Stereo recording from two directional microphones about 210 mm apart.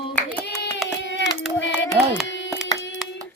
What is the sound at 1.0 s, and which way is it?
Child singing, 55° left (ahead or behind).